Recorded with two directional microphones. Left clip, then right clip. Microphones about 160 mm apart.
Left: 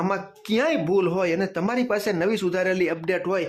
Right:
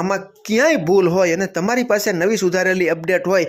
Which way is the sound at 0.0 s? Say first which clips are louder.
Right 5 dB; 20° right (ahead or behind).